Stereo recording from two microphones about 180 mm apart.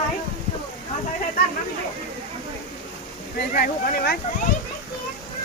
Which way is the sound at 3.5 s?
60° left (ahead or behind).